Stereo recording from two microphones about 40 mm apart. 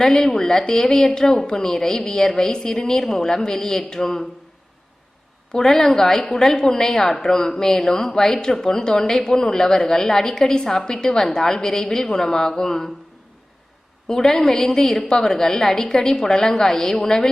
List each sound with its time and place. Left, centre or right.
0.0 s a woman's voice: centre
5.5 s a woman's voice: centre
14.1 s a woman's voice: centre